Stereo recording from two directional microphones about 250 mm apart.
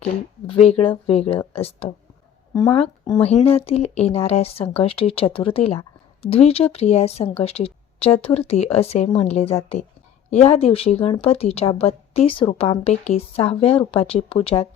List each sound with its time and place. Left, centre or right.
0.4 s a woman's voice: left